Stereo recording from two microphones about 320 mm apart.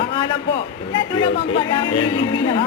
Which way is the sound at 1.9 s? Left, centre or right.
Left.